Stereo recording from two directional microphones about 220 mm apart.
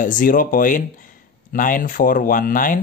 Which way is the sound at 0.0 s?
35° left (ahead or behind).